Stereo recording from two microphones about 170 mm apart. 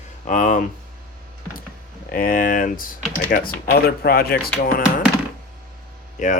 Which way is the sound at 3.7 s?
65° left (ahead or behind).